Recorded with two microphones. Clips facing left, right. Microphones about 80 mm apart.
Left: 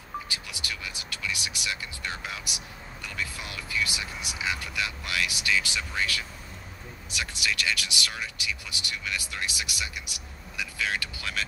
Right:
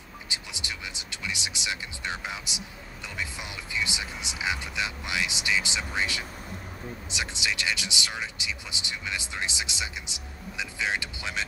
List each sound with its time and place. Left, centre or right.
0.3 s music: right
3.2 s speech: centre